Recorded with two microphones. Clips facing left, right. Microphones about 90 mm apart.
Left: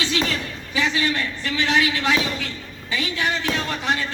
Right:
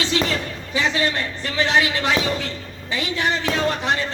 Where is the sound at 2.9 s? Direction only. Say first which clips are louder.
Right 2 dB; 35° right (ahead or behind).